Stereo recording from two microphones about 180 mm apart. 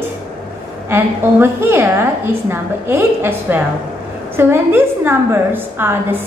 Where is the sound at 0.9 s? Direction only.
15° right (ahead or behind).